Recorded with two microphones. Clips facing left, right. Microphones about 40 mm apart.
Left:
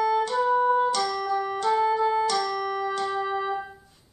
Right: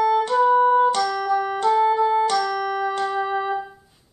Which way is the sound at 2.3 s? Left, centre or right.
Centre.